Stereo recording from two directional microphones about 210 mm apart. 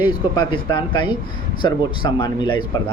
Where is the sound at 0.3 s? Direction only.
20° left (ahead or behind).